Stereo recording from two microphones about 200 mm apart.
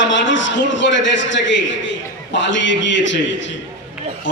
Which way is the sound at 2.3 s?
65° left (ahead or behind).